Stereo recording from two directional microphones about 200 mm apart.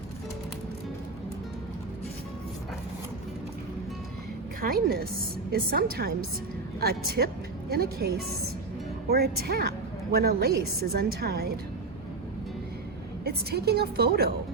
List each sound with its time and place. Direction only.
4.6 s a woman's voice: 50° right (ahead or behind)
13.2 s a woman's voice: 50° right (ahead or behind)